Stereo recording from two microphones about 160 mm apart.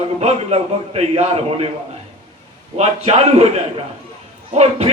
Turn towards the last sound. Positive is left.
turn(degrees=-40)  # may be behind; listen again after turning